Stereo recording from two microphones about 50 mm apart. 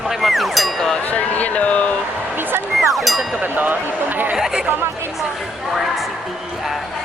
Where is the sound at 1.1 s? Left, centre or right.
Left.